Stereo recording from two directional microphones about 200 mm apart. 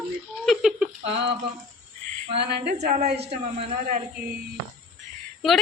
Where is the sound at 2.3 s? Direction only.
55° right (ahead or behind).